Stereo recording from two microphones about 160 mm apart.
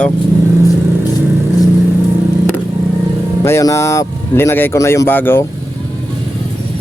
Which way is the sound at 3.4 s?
20° left (ahead or behind).